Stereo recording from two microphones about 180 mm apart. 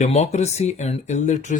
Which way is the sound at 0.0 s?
40° left (ahead or behind).